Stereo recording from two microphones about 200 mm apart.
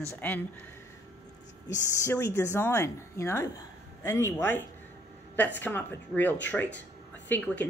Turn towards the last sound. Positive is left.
turn(degrees=10)  # may be behind; listen again after turning